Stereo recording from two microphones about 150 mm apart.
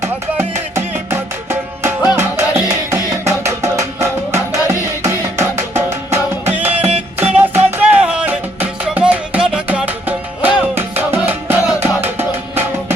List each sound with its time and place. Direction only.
0.0 s music: 15° right (ahead or behind)
6.7 s music: 45° right (ahead or behind)
6.9 s music: 10° right (ahead or behind)